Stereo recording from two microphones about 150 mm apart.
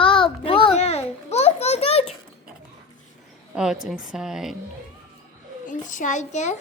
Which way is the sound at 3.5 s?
5° right (ahead or behind).